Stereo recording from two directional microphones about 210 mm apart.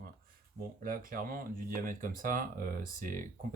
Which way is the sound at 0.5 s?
40° right (ahead or behind).